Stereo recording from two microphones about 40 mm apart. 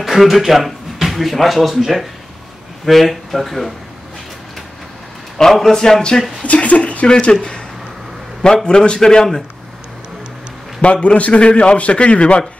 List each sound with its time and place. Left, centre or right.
0.0 s speech: centre
5.5 s a man's voice: centre
6.4 s speech: left
8.6 s a man's voice: left
10.8 s a man's voice: left